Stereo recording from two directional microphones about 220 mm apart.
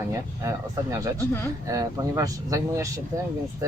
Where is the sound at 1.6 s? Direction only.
15° right (ahead or behind).